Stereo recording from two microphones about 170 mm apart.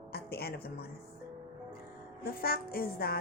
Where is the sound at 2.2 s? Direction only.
60° left (ahead or behind).